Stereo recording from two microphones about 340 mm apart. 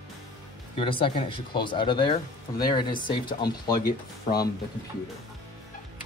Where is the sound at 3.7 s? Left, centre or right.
Left.